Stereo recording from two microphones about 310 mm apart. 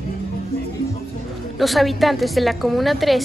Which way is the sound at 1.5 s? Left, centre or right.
Centre.